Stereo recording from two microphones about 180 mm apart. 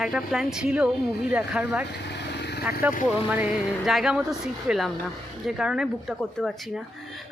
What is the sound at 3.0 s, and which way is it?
Speech, 5° right (ahead or behind).